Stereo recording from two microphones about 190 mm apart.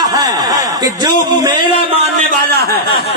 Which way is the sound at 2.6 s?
55° right (ahead or behind).